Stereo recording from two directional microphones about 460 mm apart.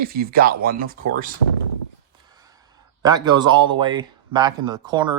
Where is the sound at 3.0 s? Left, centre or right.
Centre.